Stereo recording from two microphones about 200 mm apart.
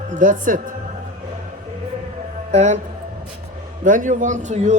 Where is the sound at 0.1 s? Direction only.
40° right (ahead or behind).